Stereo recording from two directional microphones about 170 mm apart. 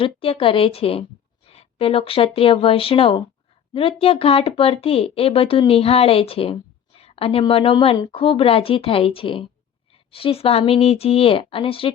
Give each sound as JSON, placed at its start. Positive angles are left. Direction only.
{"t": 0.0, "sound": "speech", "side_deg": 30}